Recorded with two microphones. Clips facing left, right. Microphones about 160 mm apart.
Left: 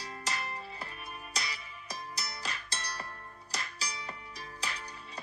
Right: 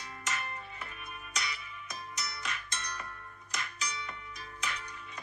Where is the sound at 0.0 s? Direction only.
35° left (ahead or behind).